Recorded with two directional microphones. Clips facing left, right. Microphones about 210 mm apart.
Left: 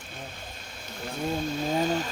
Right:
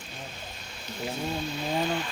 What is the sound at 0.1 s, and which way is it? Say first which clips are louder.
Cricket: left 1 dB; 50° left (ahead or behind).